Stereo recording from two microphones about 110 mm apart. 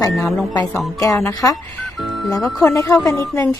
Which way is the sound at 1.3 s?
35° left (ahead or behind).